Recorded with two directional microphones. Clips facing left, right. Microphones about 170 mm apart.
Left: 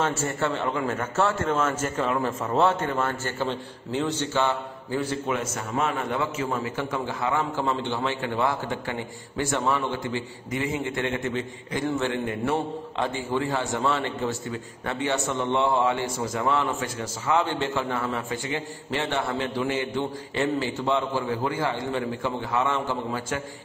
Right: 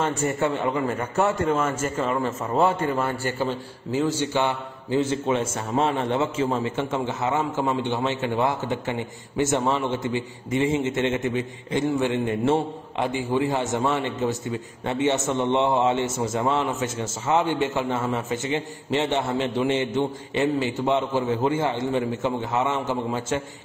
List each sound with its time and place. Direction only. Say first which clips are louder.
0.0 s a man's voice: right 2 dB; 15° right (ahead or behind)
4.3 s a man's voice: right 1 dB; 15° right (ahead or behind)